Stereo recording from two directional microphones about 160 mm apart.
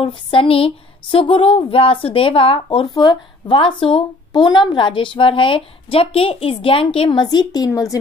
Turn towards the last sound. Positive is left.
turn(degrees=25)  # may be behind; listen again after turning